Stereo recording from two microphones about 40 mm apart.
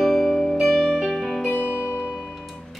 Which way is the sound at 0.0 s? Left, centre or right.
Centre.